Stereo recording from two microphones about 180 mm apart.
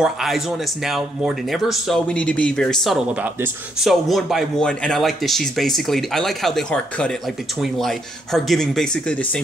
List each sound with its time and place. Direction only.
0.0 s speech: centre (ahead or behind)